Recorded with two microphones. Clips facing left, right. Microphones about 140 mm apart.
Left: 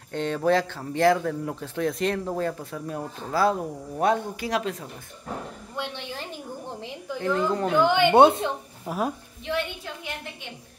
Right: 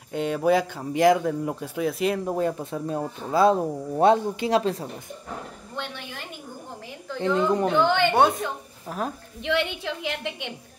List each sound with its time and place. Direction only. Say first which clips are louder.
0.1 s speech: right 1 dB; 10° right (ahead or behind); by 4.8 s 30° right (ahead or behind)
5.8 s a sound: left 1 dB; 10° left (ahead or behind)
7.2 s a child's voice: right 2 dB; centre (ahead or behind)
8.1 s speech: left 4 dB; 25° left (ahead or behind)
8.8 s a woman's voice: left 2 dB; 10° left (ahead or behind)
9.4 s a woman's voice: right 4 dB; 75° right (ahead or behind)